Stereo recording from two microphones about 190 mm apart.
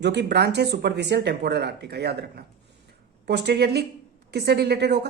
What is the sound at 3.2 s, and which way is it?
A woman's voice, 60° right (ahead or behind).